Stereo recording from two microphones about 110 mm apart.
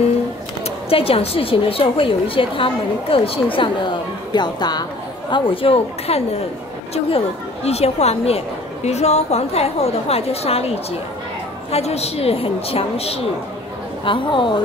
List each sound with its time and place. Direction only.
0.8 s a woman's voice: 60° left (ahead or behind); by 4.8 s 40° left (ahead or behind)
5.3 s a woman's voice: 55° left (ahead or behind)
14.0 s a woman's voice: 50° left (ahead or behind)